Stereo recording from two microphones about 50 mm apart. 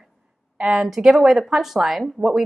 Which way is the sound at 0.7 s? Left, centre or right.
Centre.